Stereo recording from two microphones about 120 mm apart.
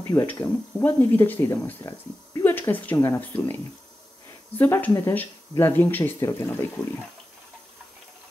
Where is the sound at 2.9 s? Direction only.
30° left (ahead or behind).